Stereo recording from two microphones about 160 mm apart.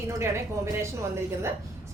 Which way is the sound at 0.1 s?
15° right (ahead or behind).